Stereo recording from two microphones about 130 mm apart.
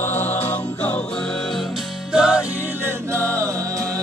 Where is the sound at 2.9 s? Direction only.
20° right (ahead or behind).